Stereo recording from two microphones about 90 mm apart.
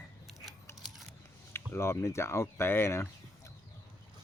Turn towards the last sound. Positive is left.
turn(degrees=25)  # may be behind; listen again after turning